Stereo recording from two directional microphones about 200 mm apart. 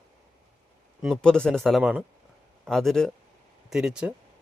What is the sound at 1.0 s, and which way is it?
Speech, centre (ahead or behind).